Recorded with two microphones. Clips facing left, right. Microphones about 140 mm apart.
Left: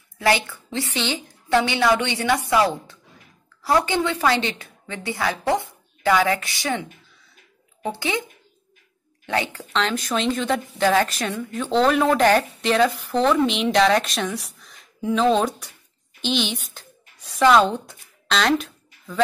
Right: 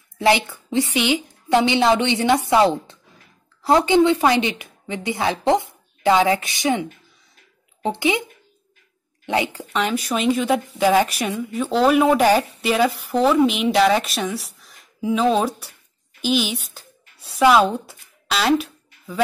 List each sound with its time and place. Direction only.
0.2 s a woman's voice: 20° right (ahead or behind)